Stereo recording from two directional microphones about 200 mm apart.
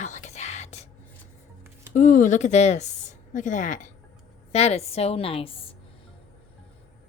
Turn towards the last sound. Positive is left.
turn(degrees=30)  # may be behind; listen again after turning